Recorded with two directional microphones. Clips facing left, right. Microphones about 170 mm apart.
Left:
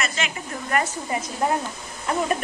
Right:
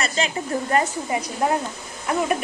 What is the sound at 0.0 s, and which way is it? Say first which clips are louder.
Speech: right 4 dB; 30° right (ahead or behind).